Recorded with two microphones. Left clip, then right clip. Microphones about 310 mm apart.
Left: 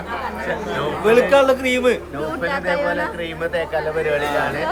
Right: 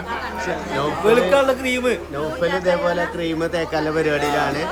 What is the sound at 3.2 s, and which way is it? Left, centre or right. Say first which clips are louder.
Speech: right 1 dB; right.